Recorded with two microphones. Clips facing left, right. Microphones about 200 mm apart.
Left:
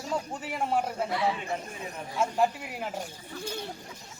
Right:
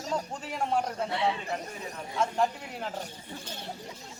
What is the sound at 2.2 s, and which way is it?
Speech, 10° left (ahead or behind).